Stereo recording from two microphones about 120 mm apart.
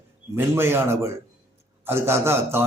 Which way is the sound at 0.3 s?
20° right (ahead or behind).